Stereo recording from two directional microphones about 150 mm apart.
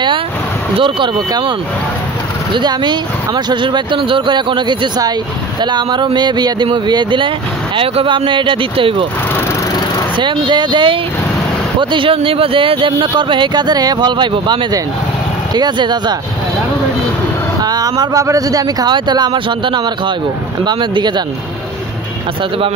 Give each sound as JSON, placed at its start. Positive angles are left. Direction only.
{"t": 0.7, "sound": "speech", "side_deg": -35}
{"t": 2.5, "sound": "speech", "side_deg": -30}
{"t": 10.1, "sound": "speech", "side_deg": -35}
{"t": 17.6, "sound": "speech", "side_deg": -25}